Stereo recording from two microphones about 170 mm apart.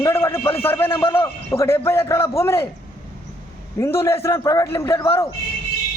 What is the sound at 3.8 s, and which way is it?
A man's voice, 15° left (ahead or behind).